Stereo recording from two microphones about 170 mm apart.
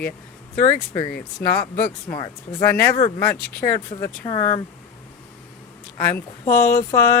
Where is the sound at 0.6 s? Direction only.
30° left (ahead or behind).